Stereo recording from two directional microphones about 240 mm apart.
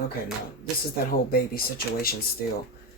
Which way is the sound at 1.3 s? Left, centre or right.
Left.